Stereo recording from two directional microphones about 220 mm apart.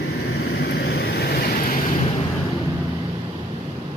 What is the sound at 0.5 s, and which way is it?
Vehicle, 45° left (ahead or behind).